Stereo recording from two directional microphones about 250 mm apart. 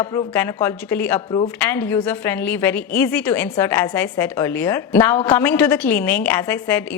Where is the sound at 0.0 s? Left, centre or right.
Centre.